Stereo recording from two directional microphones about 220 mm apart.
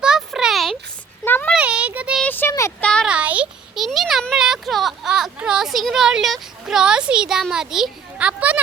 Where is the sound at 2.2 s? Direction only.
10° left (ahead or behind).